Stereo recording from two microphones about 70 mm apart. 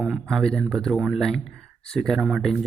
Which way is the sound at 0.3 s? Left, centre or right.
Centre.